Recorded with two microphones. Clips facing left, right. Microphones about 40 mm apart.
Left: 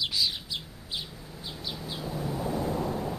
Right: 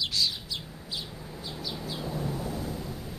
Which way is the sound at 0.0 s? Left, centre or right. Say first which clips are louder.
Even; centre.